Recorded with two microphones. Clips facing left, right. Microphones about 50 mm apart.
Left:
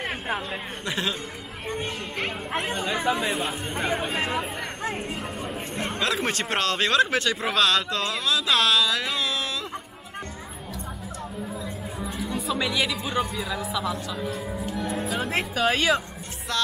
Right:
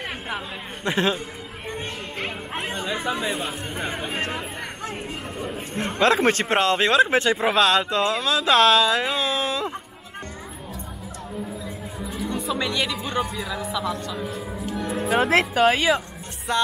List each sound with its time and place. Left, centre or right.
0.8 s a man's voice: right
1.7 s speech: centre
5.9 s speech: right
12.1 s speech: centre
15.0 s speech: right
15.6 s speech: centre
16.5 s speech: right